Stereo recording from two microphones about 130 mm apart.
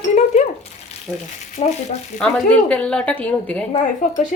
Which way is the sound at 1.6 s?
75° left (ahead or behind).